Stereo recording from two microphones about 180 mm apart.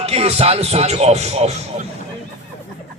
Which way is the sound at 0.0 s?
35° right (ahead or behind).